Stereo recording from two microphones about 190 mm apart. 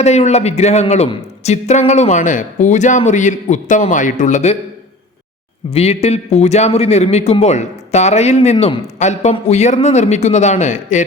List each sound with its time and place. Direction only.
0.0 s a man's voice: 35° left (ahead or behind)
5.7 s a man's voice: 35° left (ahead or behind)